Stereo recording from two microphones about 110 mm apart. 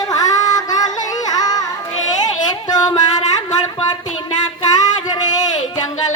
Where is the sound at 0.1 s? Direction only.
35° left (ahead or behind).